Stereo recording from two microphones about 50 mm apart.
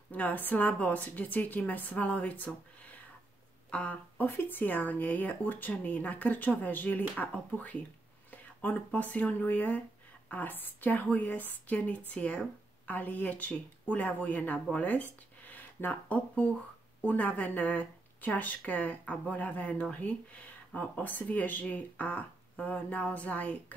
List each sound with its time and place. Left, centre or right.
0.1 s speech: left
4.3 s speech: left